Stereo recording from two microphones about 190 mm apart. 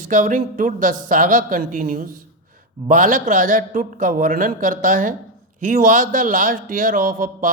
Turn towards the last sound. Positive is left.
turn(degrees=-45)  # may be behind; listen again after turning